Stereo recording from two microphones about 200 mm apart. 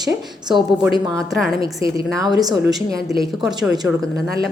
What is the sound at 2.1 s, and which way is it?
A woman's voice, 20° right (ahead or behind).